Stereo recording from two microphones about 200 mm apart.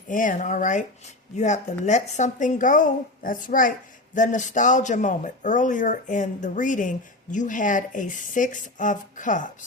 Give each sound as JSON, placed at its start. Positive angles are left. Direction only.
{"t": 0.1, "sound": "speech", "side_deg": 40}